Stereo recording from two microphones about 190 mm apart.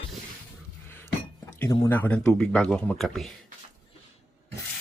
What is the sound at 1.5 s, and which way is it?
Speech, 15° left (ahead or behind).